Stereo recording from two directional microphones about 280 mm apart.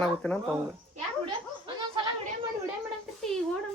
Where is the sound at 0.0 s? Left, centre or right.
Centre.